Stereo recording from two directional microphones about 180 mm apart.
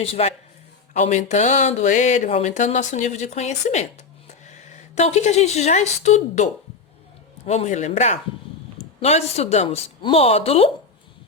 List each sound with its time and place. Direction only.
0.0 s a woman's voice: 35° left (ahead or behind)